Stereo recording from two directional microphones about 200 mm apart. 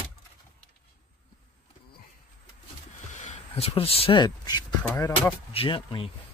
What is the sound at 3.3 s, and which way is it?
Speech, 30° left (ahead or behind).